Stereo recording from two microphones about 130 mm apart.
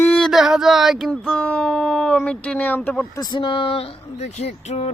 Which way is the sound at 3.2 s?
35° left (ahead or behind).